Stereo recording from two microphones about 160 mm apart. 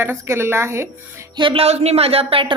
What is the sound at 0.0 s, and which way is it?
A woman's voice, 15° right (ahead or behind).